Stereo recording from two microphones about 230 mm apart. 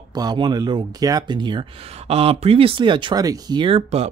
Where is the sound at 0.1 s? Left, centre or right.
Centre.